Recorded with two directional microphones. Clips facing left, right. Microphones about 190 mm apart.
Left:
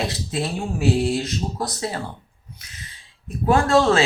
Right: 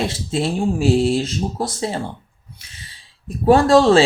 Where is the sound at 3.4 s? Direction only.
35° right (ahead or behind).